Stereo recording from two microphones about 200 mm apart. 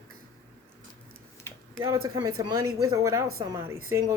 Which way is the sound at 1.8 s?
20° right (ahead or behind).